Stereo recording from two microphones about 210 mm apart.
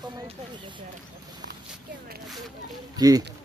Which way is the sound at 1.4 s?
50° right (ahead or behind).